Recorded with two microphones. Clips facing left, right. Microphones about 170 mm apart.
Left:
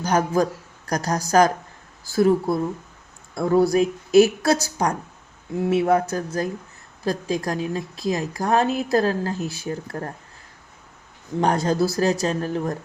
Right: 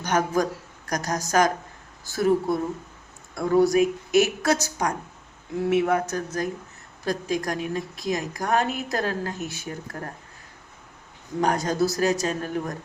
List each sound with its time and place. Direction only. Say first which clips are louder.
0.0 s a man's voice: left 3 dB; 30° left (ahead or behind)
11.3 s speech: left 3 dB; 30° left (ahead or behind)